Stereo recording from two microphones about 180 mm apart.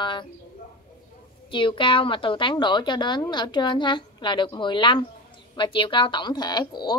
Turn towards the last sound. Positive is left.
turn(degrees=25)  # may be behind; listen again after turning